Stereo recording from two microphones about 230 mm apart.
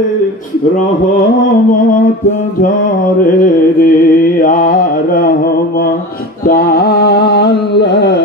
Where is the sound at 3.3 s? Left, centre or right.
Left.